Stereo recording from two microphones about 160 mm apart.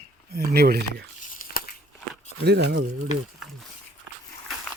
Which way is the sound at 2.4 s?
85° right.